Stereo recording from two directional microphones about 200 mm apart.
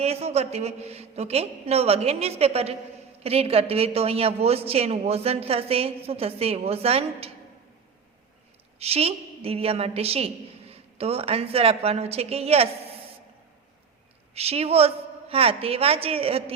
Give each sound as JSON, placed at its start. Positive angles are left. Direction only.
{"t": 0.0, "sound": "a woman's voice", "side_deg": -30}
{"t": 8.8, "sound": "a woman's voice", "side_deg": -30}
{"t": 14.3, "sound": "a woman's voice", "side_deg": -30}